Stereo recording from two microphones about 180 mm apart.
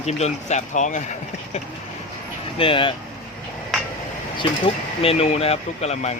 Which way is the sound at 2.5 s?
30° left (ahead or behind).